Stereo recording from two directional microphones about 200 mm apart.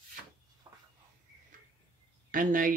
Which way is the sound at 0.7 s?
20° right (ahead or behind).